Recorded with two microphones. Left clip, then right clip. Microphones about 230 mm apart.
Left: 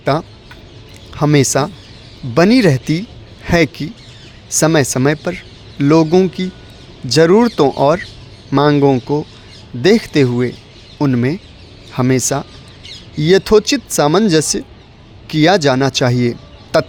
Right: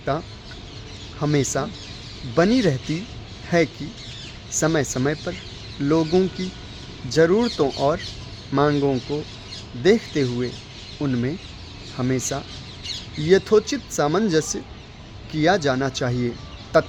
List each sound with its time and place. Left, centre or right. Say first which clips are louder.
0.0 s a man's voice: left 9 dB; left